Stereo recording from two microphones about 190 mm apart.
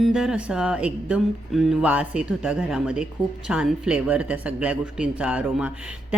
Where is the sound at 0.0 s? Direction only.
5° right (ahead or behind).